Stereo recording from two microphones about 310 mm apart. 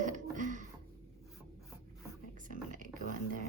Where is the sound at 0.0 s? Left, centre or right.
Right.